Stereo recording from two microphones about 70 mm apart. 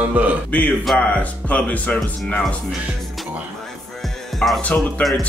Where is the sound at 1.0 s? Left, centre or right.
Left.